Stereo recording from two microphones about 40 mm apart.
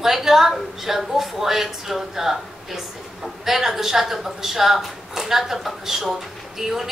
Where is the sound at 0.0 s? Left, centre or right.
Centre.